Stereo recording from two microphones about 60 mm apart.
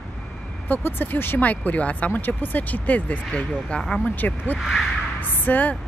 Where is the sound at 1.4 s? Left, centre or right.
Left.